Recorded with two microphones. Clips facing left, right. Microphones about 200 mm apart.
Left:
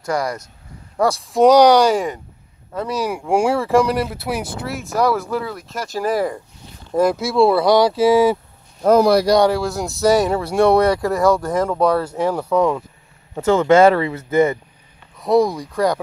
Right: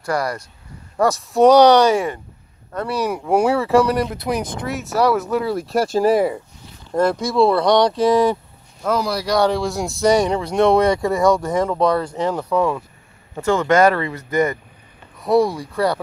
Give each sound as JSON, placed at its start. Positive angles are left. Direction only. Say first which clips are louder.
{"t": 0.1, "sound": "speech", "louder": "even", "side_deg": -5}
{"t": 0.9, "sound": "speech", "louder": "even", "side_deg": 10}
{"t": 5.4, "sound": "speech", "louder": "right 8 dB", "side_deg": -35}
{"t": 6.9, "sound": "speech", "louder": "left 1 dB", "side_deg": 5}
{"t": 8.8, "sound": "speech", "louder": "left 8 dB", "side_deg": 50}
{"t": 9.4, "sound": "speech", "louder": "left 1 dB", "side_deg": 5}
{"t": 13.7, "sound": "speech", "louder": "left 3 dB", "side_deg": 25}
{"t": 13.9, "sound": "speech", "louder": "left 3 dB", "side_deg": 5}
{"t": 15.6, "sound": "speech", "louder": "left 1 dB", "side_deg": 15}